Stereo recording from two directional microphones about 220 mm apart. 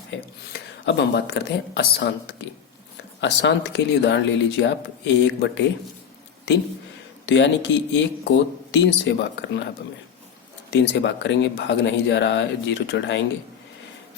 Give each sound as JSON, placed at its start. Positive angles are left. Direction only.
{"t": 0.5, "sound": "speech", "side_deg": 50}
{"t": 7.3, "sound": "speech", "side_deg": 55}